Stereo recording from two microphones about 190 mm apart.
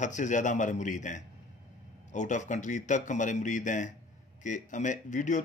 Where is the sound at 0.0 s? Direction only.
40° left (ahead or behind).